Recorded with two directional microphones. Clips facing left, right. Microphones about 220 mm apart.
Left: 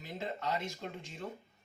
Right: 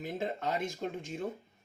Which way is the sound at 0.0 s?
50° right (ahead or behind).